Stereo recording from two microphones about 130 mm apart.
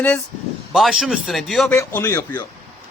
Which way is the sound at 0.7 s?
Centre (ahead or behind).